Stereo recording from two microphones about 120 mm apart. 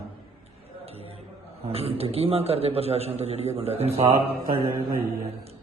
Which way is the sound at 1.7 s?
55° right (ahead or behind).